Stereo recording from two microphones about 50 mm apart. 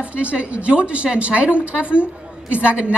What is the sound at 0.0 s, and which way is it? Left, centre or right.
A woman's voice, right.